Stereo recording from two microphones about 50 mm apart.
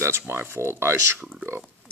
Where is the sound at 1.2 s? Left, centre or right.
Centre.